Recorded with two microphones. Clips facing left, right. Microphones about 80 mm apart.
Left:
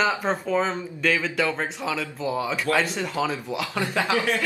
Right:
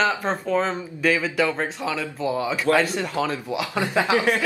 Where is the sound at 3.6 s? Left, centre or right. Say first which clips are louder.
Right 3 dB; centre.